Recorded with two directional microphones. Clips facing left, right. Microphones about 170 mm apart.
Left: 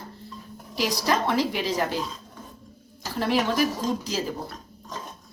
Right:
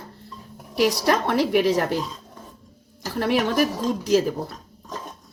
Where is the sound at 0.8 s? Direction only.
65° right (ahead or behind).